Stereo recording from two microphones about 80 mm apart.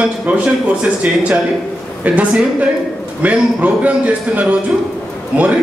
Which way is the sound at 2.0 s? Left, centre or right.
Centre.